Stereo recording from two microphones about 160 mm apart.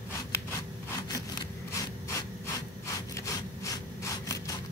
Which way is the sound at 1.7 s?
15° left (ahead or behind).